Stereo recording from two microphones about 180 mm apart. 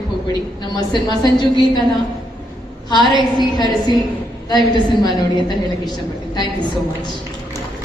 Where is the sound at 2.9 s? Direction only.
25° left (ahead or behind).